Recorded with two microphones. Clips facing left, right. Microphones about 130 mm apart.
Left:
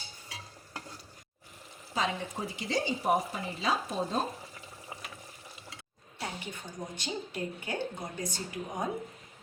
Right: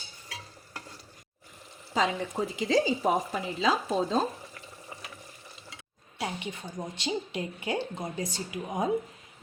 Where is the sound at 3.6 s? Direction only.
90° right.